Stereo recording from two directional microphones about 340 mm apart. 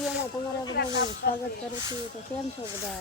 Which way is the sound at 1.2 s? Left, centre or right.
Left.